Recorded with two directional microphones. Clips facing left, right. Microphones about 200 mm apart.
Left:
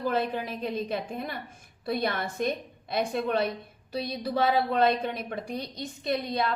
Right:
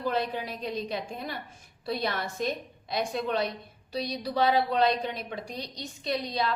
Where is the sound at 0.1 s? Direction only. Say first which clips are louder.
Left 2 dB; 50° left (ahead or behind).